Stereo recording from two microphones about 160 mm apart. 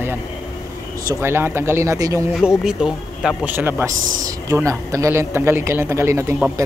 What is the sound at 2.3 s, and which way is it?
A man's voice, 5° right (ahead or behind).